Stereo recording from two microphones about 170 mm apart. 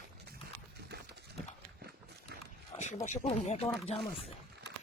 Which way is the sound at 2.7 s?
45° left (ahead or behind).